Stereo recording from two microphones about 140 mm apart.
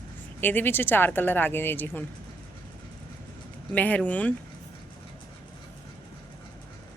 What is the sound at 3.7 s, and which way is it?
Speech, 10° left (ahead or behind).